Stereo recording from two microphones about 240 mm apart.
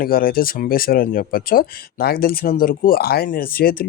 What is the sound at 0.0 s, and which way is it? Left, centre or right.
Speech, left.